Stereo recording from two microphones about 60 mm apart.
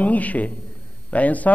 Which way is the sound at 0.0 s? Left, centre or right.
Left.